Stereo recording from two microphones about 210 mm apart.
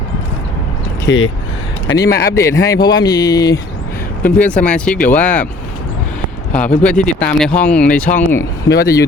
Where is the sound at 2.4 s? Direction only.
15° left (ahead or behind).